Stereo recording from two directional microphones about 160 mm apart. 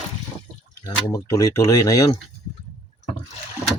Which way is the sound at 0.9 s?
20° left (ahead or behind).